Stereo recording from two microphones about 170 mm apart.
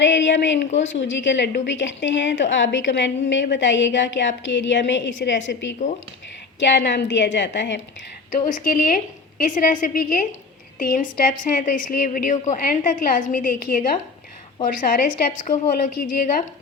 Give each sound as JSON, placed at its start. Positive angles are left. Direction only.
{"t": 0.0, "sound": "a woman's voice", "side_deg": 90}
{"t": 8.4, "sound": "a woman's voice", "side_deg": 50}